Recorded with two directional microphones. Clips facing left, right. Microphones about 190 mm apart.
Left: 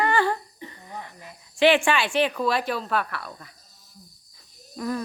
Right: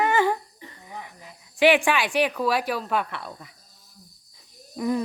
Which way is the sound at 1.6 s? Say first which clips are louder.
Even; 10° right (ahead or behind).